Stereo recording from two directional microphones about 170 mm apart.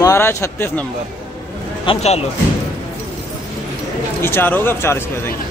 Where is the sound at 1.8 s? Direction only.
40° left (ahead or behind).